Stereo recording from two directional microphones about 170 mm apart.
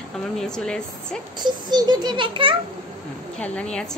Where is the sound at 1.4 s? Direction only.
25° right (ahead or behind).